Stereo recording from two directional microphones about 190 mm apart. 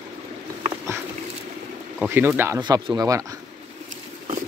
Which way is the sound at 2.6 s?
20° right (ahead or behind).